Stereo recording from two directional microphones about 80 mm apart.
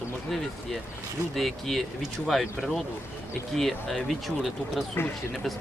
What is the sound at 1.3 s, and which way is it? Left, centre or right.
Speech, centre.